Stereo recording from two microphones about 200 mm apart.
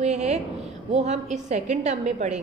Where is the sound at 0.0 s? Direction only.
35° right (ahead or behind).